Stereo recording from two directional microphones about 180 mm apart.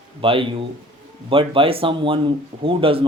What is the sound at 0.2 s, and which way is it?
Speech, 30° right (ahead or behind).